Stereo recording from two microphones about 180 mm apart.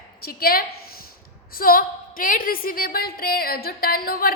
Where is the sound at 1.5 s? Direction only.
55° left (ahead or behind).